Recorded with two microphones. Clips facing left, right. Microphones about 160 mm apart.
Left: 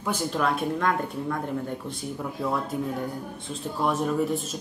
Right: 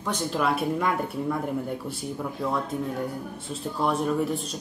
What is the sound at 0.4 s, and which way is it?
Speech, 5° right (ahead or behind).